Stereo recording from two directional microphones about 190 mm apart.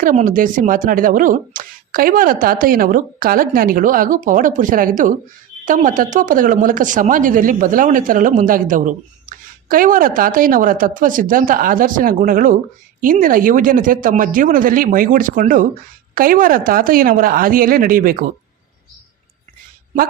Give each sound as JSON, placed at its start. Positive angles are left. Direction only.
{"t": 0.0, "sound": "speech", "side_deg": -45}